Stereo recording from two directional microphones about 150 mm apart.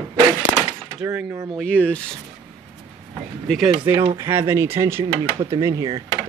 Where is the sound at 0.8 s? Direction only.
15° right (ahead or behind).